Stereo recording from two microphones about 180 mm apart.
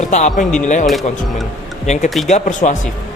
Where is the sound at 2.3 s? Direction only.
40° left (ahead or behind).